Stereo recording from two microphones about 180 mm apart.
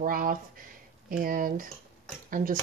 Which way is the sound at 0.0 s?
50° right (ahead or behind).